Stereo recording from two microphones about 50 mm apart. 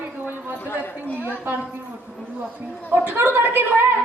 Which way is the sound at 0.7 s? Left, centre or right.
Left.